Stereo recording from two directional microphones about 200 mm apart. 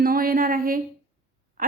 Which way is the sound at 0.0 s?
50° right (ahead or behind).